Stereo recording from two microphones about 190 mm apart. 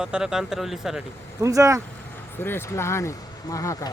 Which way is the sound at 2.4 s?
10° left (ahead or behind).